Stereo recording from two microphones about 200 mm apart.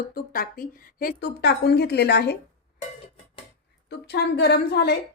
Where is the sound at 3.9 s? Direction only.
55° left (ahead or behind).